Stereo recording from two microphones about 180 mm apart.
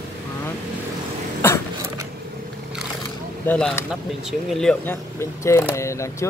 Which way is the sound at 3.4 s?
5° left (ahead or behind).